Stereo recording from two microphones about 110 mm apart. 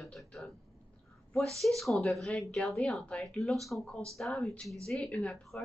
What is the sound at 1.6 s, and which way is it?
Speech, centre (ahead or behind).